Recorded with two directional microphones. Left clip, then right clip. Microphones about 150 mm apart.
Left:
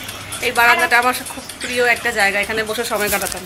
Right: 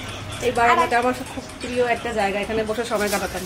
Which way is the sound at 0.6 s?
10° right (ahead or behind).